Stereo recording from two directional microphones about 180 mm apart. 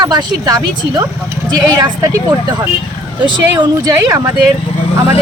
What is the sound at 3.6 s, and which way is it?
Speech, 20° right (ahead or behind).